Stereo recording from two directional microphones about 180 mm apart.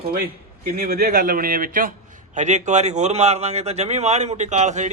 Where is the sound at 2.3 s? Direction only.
40° right (ahead or behind).